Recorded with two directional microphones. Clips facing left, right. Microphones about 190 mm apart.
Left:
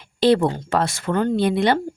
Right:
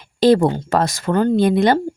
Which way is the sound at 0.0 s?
40° right (ahead or behind).